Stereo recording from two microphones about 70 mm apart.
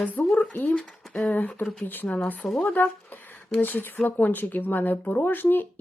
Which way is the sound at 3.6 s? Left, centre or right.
Left.